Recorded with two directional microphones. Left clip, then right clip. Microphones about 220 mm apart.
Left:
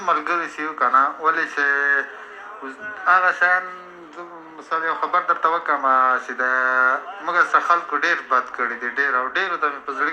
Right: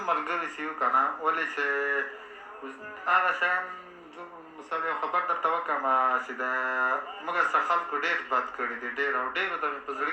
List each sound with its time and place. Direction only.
0.0 s speech: 25° left (ahead or behind)
3.0 s speech: 25° left (ahead or behind)
4.7 s speech: 25° left (ahead or behind)